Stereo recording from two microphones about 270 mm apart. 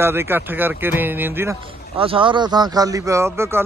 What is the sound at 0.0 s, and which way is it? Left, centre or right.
A man's voice, centre.